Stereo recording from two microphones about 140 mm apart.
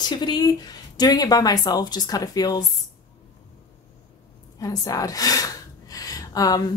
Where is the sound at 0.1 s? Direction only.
30° left (ahead or behind).